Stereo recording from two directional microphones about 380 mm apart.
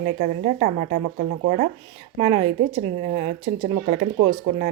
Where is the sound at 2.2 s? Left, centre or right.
Centre.